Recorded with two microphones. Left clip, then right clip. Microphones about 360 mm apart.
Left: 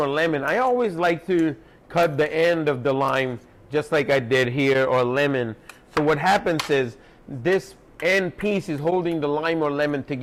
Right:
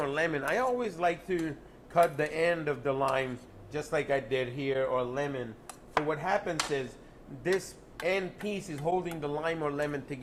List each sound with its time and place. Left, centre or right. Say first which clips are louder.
0.0 s a man's voice: left 8 dB; left
6.1 s speech: left 14 dB; left
8.0 s a man's voice: left 10 dB; left